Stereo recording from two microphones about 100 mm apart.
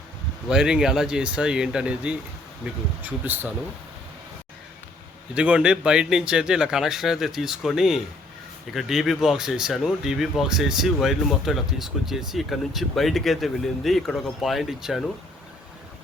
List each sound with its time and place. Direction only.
0.4 s speech: 5° right (ahead or behind)
5.3 s speech: 10° right (ahead or behind)